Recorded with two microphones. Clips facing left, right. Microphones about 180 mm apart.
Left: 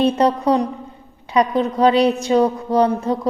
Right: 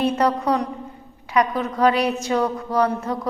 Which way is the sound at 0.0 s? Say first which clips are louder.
Left 4 dB; 25° left (ahead or behind).